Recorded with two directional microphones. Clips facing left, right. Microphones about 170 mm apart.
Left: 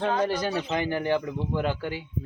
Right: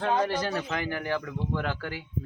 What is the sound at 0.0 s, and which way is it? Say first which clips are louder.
Speech: left 1 dB; 15° left (ahead or behind).